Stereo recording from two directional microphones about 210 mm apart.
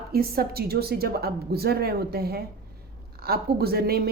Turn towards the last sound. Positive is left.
turn(degrees=-45)  # may be behind; listen again after turning